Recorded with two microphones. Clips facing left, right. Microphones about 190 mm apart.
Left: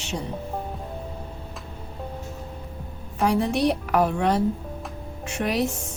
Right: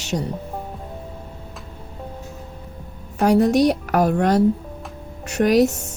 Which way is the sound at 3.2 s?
45° right (ahead or behind).